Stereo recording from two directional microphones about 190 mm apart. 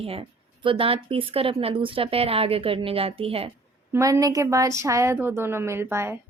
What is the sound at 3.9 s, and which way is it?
A woman's voice, 15° right (ahead or behind).